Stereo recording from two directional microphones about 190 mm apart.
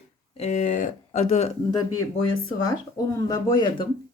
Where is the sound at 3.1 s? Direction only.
20° left (ahead or behind).